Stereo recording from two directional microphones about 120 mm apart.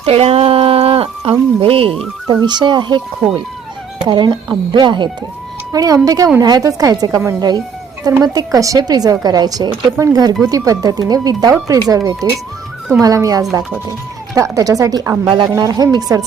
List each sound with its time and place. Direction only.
0.0 s a sound: 55° right (ahead or behind)
2.2 s a woman's voice: 35° right (ahead or behind)
8.2 s a woman's voice: 30° right (ahead or behind)